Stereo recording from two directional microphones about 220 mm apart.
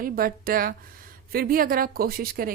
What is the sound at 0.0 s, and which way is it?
Speech, 40° right (ahead or behind).